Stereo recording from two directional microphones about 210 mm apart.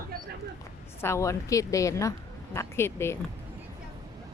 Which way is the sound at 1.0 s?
15° left (ahead or behind).